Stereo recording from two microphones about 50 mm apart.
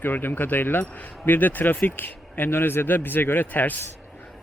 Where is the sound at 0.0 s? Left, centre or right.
Left.